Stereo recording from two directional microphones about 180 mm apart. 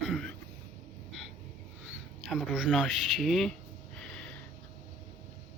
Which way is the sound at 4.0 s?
5° left (ahead or behind).